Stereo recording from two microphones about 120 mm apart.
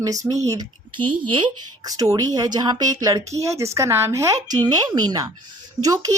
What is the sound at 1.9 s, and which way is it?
A woman's voice, 30° right (ahead or behind).